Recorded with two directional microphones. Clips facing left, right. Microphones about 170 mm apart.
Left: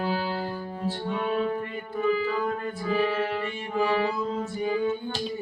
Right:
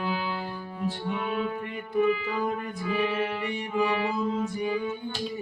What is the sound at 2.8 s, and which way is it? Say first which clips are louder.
Music: left 2 dB; 40° left (ahead or behind).